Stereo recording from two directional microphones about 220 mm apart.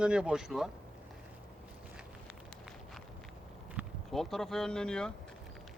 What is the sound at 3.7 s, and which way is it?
Speech, centre (ahead or behind).